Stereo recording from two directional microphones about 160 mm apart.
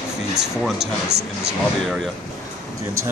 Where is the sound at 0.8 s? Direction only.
90° right.